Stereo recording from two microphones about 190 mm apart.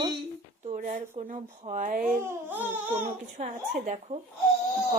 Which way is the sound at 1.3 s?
40° right (ahead or behind).